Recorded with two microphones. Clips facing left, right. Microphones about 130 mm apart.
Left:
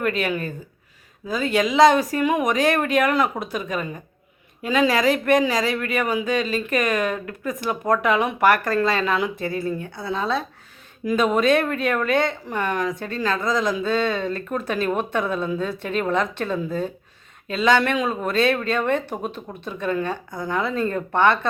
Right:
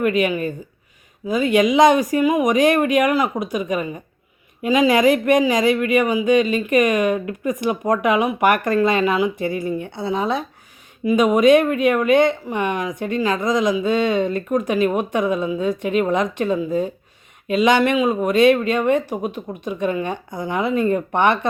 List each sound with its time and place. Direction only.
0.0 s speech: 10° right (ahead or behind)